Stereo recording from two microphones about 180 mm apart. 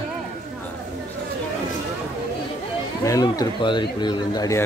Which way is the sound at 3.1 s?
20° left (ahead or behind).